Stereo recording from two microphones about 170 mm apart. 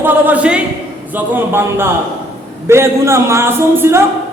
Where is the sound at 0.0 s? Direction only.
10° right (ahead or behind).